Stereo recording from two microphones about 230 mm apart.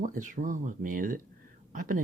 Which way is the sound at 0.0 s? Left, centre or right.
Right.